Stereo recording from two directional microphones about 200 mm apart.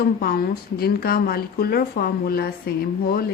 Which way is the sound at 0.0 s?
50° left (ahead or behind).